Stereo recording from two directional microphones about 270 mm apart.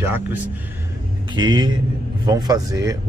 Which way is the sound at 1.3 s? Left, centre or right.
Centre.